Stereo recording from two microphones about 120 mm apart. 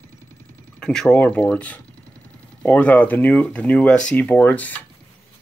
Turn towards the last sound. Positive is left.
turn(degrees=15)  # may be behind; listen again after turning